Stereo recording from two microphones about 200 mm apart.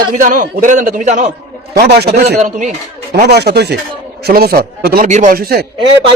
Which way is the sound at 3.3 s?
55° right (ahead or behind).